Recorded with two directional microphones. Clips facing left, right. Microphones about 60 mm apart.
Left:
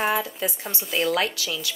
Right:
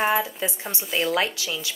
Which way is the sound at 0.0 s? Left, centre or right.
Right.